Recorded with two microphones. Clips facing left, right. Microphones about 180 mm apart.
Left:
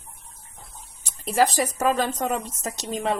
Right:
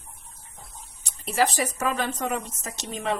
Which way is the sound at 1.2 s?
40° left (ahead or behind).